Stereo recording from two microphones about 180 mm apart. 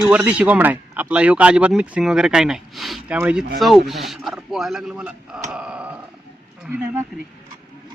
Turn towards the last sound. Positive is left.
turn(degrees=-10)  # may be behind; listen again after turning